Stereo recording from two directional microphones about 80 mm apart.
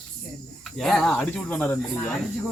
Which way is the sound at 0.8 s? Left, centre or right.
Centre.